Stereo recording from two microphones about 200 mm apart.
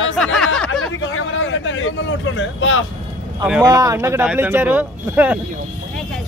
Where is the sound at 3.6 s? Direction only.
20° right (ahead or behind).